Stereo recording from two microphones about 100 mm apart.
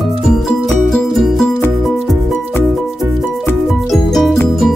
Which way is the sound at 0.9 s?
Centre (ahead or behind).